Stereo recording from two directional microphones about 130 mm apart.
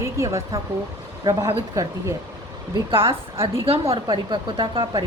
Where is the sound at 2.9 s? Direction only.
45° right (ahead or behind).